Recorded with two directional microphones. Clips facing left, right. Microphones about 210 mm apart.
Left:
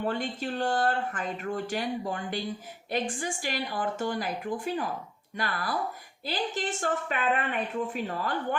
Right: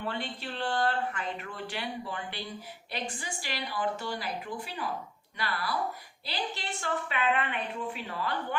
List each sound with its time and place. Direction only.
0.0 s speech: 45° left (ahead or behind)